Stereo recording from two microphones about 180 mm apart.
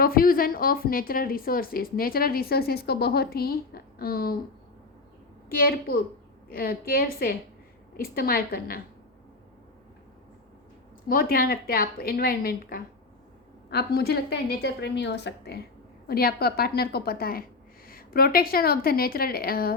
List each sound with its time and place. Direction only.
0.0 s a woman's voice: 55° left (ahead or behind)
5.5 s a woman's voice: 55° left (ahead or behind)
11.1 s a woman's voice: 55° left (ahead or behind)